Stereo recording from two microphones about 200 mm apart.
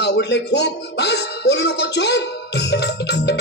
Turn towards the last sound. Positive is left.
turn(degrees=55)  # may be behind; listen again after turning